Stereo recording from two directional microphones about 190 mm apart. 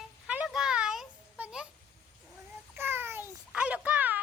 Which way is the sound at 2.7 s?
10° right (ahead or behind).